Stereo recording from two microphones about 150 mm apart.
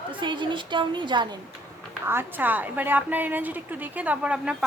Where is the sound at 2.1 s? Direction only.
15° right (ahead or behind).